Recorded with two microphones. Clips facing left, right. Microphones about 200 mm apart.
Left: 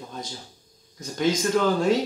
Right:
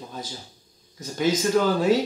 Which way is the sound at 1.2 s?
5° right (ahead or behind).